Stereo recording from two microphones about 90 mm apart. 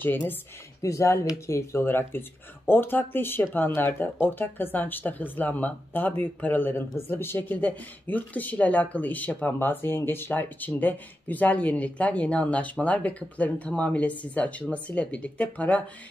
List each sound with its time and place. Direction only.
0.0 s speech: 25° left (ahead or behind)
0.8 s speech: 35° left (ahead or behind); by 15.8 s 15° left (ahead or behind)